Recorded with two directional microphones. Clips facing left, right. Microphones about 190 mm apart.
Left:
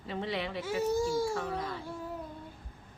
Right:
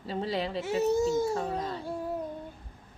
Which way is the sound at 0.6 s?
25° right (ahead or behind).